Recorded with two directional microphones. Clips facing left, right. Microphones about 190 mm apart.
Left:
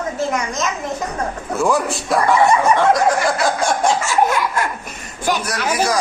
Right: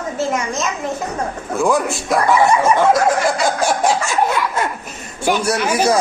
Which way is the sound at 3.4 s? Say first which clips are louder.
Right 1 dB; 5° right (ahead or behind).